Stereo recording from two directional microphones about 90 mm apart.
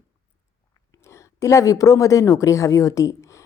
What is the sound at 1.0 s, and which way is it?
A woman's voice, 30° left (ahead or behind).